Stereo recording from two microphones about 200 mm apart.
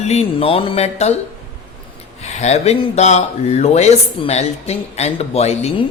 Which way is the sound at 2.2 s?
35° left (ahead or behind).